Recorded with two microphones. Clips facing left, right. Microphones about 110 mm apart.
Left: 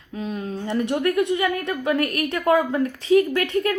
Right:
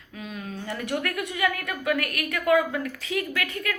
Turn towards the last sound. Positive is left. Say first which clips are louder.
# left 9 dB
turn(degrees=35)  # may be behind; listen again after turning